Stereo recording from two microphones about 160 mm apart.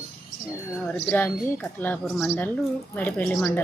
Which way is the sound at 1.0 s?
10° left (ahead or behind).